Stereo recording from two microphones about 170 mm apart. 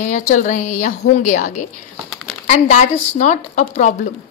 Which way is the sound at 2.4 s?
45° left (ahead or behind).